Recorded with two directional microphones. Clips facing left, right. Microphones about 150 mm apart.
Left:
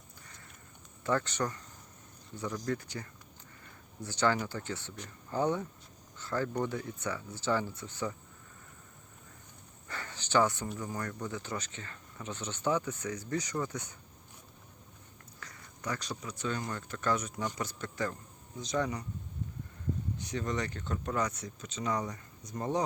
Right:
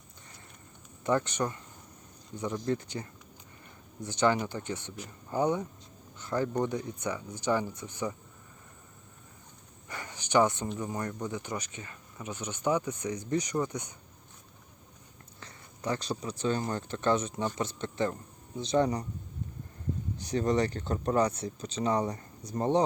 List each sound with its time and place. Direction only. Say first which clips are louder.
1.0 s speech: right 3 dB; 20° right (ahead or behind)
9.9 s a sound: right 3 dB; 15° right (ahead or behind)
10.8 s speech: right 3 dB; 20° right (ahead or behind)
15.4 s speech: right 3 dB; 25° right (ahead or behind)
20.1 s speech: right 10 dB; 35° right (ahead or behind)